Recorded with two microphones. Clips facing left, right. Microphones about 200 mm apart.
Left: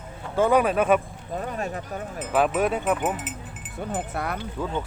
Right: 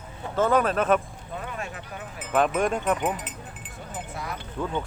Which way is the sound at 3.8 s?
60° left (ahead or behind).